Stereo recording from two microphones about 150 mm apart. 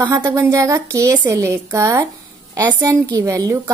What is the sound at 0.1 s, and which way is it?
A woman's voice, 20° right (ahead or behind).